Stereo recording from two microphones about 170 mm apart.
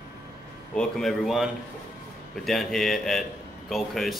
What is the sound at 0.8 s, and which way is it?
A man's voice, centre (ahead or behind).